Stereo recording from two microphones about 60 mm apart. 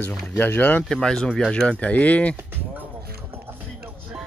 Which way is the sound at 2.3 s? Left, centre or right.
Right.